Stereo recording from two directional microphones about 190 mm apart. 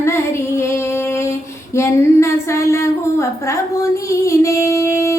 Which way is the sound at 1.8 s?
15° left (ahead or behind).